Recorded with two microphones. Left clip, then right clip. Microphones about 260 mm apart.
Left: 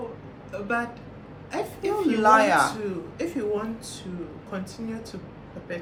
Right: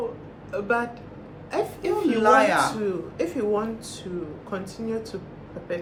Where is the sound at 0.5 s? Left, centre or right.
Centre.